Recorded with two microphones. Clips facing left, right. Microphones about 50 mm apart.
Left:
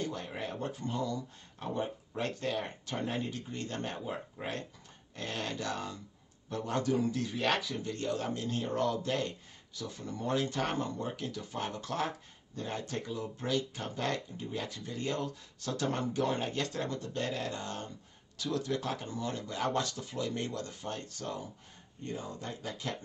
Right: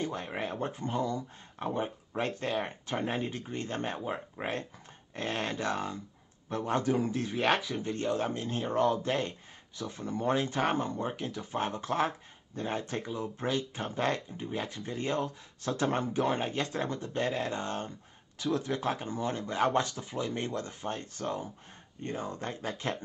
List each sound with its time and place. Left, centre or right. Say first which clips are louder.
0.0 s speech: right 3 dB; right